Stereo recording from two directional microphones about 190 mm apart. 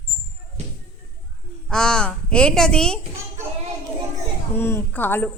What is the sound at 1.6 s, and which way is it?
Speech, 5° left (ahead or behind).